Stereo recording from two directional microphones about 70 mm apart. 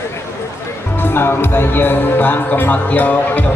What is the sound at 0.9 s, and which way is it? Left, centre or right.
Speech, left.